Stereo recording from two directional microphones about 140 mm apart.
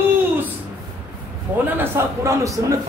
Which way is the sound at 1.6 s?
15° right (ahead or behind).